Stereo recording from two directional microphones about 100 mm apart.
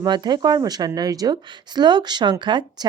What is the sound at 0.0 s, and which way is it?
A woman's voice, 45° right (ahead or behind).